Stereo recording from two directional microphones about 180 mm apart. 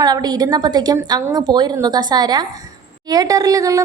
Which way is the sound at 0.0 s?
20° right (ahead or behind).